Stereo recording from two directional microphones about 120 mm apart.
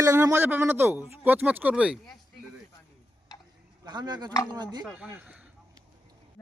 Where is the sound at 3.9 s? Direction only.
35° right (ahead or behind).